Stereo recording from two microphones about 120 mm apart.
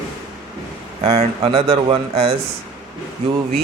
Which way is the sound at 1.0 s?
55° right (ahead or behind).